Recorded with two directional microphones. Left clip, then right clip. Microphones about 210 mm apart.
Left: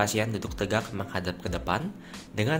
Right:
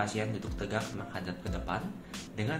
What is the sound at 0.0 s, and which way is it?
A man's voice, 55° left (ahead or behind).